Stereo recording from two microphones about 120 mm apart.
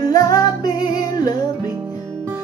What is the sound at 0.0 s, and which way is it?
Music, 30° left (ahead or behind).